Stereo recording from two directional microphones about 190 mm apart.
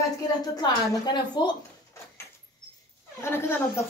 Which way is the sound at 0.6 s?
20° left (ahead or behind).